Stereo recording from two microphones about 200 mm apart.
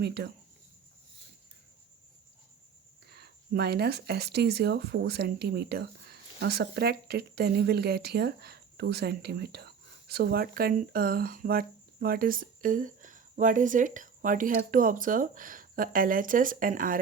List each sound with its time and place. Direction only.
0.0 s speech: 55° right (ahead or behind)
3.1 s speech: 55° right (ahead or behind)